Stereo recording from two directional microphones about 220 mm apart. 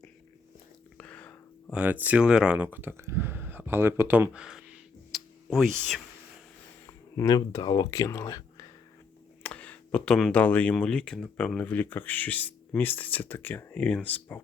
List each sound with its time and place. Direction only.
0.9 s a sound: 5° left (ahead or behind)
1.7 s speech: 5° right (ahead or behind)
6.8 s speech: 15° left (ahead or behind)